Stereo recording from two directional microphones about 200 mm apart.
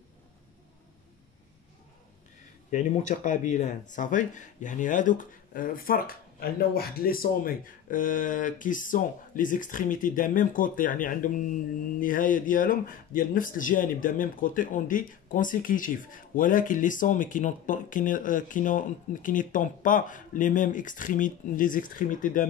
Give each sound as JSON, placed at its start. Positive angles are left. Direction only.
{"t": 2.7, "sound": "speech", "side_deg": 35}